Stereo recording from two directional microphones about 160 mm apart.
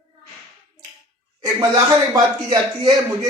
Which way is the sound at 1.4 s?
20° right (ahead or behind).